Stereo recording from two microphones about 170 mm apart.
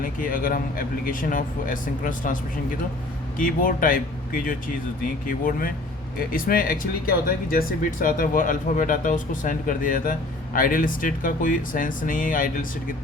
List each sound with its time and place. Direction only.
0.0 s speech: 55° left (ahead or behind)